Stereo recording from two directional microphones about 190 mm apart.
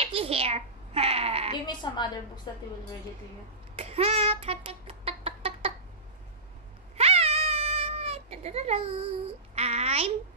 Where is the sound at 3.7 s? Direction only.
30° right (ahead or behind).